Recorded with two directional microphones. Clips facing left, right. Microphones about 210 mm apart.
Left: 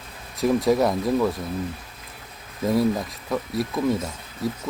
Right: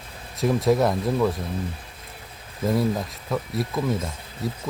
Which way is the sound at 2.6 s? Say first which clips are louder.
Left 2 dB; centre (ahead or behind).